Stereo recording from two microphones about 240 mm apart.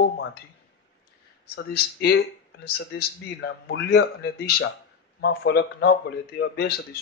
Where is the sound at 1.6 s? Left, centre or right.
Left.